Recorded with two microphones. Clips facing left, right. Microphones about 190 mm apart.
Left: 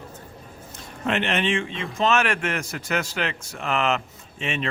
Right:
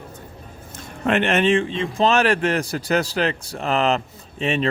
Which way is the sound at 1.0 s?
50° right (ahead or behind).